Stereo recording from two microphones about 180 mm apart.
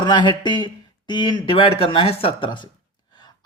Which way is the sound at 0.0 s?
25° left (ahead or behind).